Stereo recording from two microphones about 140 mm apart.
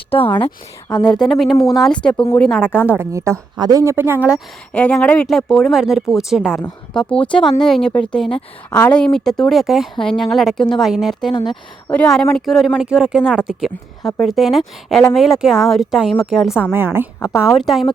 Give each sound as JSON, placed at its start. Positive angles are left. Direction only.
{"t": 0.3, "sound": "speech", "side_deg": 10}
{"t": 2.9, "sound": "speech", "side_deg": -20}
{"t": 4.7, "sound": "speech", "side_deg": 5}
{"t": 16.7, "sound": "speech", "side_deg": -15}
{"t": 17.2, "sound": "a woman's voice", "side_deg": 20}
{"t": 17.6, "sound": "speech", "side_deg": 0}